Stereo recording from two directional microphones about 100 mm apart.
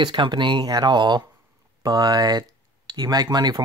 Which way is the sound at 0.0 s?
50° right (ahead or behind).